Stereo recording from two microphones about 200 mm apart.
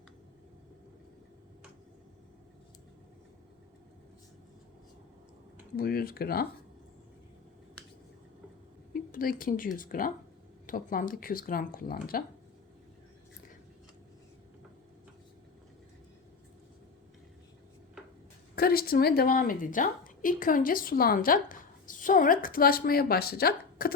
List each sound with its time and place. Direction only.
5.7 s speech: 50° left (ahead or behind)
8.9 s speech: 45° left (ahead or behind)
18.5 s a woman's voice: 50° left (ahead or behind)